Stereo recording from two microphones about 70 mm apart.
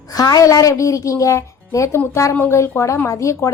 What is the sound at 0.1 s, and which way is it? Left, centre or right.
A woman's voice, left.